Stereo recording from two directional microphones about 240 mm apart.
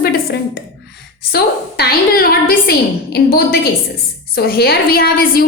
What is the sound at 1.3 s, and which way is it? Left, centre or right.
A woman's voice, left.